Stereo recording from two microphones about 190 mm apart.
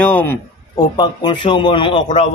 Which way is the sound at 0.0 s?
10° left (ahead or behind).